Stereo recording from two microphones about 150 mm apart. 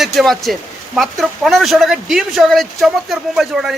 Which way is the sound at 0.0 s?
Centre (ahead or behind).